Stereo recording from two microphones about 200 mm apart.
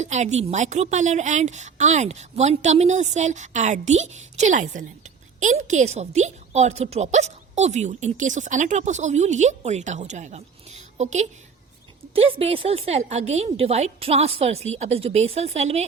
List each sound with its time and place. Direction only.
0.0 s a woman's voice: 35° right (ahead or behind)